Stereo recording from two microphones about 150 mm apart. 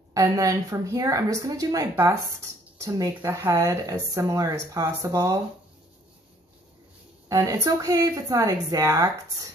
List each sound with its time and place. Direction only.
0.1 s speech: 20° right (ahead or behind)
7.2 s speech: 20° right (ahead or behind)